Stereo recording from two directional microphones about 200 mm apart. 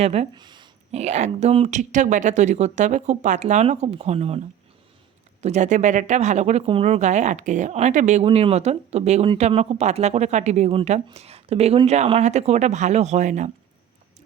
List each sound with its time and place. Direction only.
0.0 s speech: 30° right (ahead or behind)
5.4 s speech: 35° right (ahead or behind)